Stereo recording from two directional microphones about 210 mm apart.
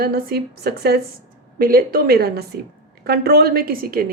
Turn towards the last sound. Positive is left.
turn(degrees=-45)  # may be behind; listen again after turning